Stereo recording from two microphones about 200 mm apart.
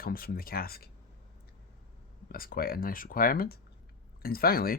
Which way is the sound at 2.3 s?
45° left (ahead or behind).